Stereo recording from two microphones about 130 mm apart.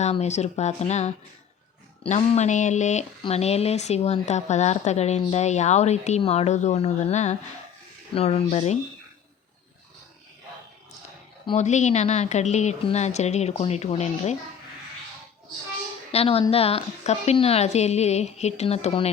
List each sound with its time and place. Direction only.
0.0 s speech: 60° left (ahead or behind)
11.5 s speech: 65° left (ahead or behind)
16.1 s speech: 50° left (ahead or behind)